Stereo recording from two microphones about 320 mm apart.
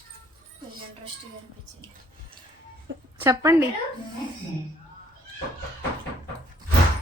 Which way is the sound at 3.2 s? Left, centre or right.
Centre.